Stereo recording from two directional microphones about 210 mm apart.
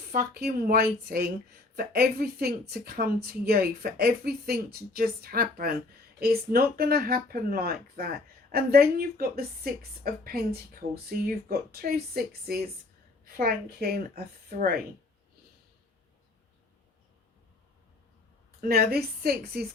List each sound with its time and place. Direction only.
0.1 s a woman's voice: 45° right (ahead or behind)
18.6 s a woman's voice: 45° right (ahead or behind)